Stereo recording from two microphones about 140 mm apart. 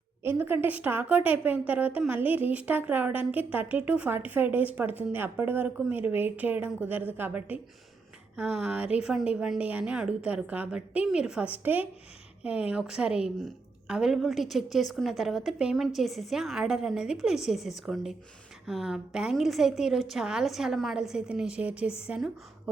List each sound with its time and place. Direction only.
0.2 s a woman's voice: 15° right (ahead or behind)